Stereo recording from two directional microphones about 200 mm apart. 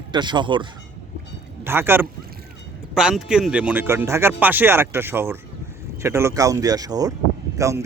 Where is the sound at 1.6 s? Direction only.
10° right (ahead or behind).